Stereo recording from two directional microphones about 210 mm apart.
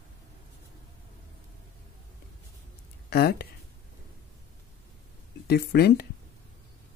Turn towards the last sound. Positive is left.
turn(degrees=50)  # may be behind; listen again after turning